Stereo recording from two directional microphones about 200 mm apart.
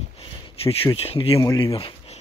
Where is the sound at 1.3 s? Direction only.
15° left (ahead or behind).